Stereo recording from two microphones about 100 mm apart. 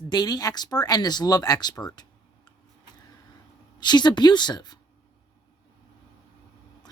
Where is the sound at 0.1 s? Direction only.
40° left (ahead or behind).